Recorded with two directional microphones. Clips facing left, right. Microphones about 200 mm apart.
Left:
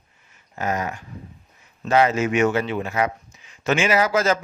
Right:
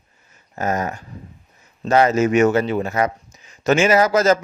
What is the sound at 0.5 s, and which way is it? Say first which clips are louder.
Speech: right 3 dB; 40° right (ahead or behind).